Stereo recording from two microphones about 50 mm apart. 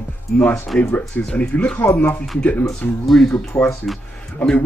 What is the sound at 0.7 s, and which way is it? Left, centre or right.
Speech, centre.